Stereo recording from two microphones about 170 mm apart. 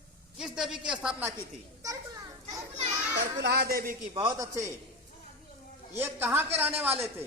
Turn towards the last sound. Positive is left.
turn(degrees=-10)  # may be behind; listen again after turning